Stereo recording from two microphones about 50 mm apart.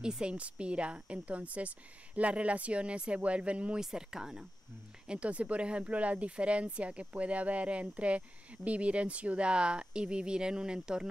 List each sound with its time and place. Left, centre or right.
0.0 s speech: centre
3.8 s speech: centre
5.0 s speech: right